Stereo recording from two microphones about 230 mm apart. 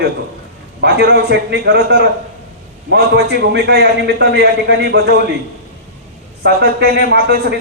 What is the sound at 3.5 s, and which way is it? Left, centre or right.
A man's voice, right.